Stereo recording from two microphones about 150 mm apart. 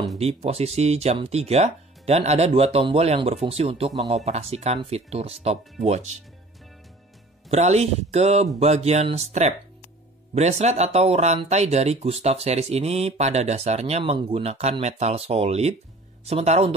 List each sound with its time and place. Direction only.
0.2 s speech: 45° right (ahead or behind)
7.4 s speech: 45° right (ahead or behind)